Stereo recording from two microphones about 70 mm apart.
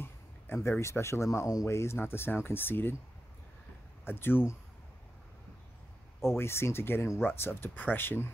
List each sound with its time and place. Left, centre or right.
0.0 s speech: left
4.0 s speech: left
6.3 s speech: left